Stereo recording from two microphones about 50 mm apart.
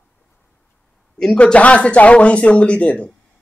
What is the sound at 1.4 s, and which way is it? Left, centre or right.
Speech, left.